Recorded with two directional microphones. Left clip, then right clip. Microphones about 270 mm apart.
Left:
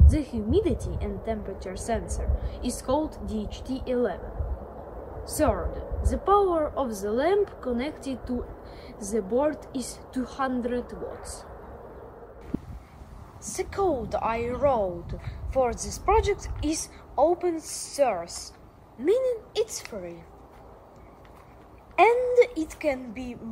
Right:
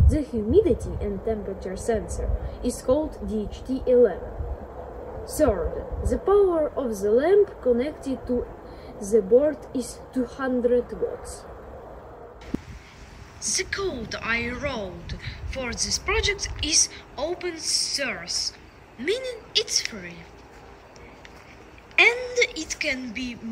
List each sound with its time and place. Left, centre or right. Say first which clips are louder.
0.1 s a woman's voice: right 6 dB; centre
5.3 s a woman's voice: right 3 dB; centre
13.4 s a woman's voice: right 1 dB; left
21.9 s a woman's voice: left 1 dB; left